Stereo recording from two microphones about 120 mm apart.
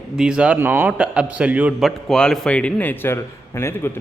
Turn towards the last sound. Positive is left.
turn(degrees=20)  # may be behind; listen again after turning